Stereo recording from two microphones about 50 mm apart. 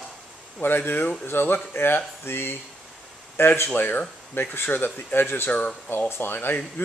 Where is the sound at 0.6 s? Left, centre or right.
Left.